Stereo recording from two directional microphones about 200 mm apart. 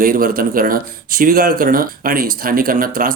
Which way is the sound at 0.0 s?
45° right (ahead or behind).